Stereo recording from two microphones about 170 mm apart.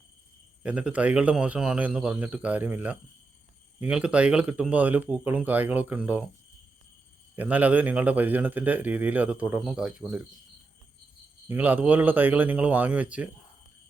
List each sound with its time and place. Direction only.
0.6 s a man's voice: 5° right (ahead or behind)
7.3 s a man's voice: 10° right (ahead or behind)
11.4 s a man's voice: 10° right (ahead or behind)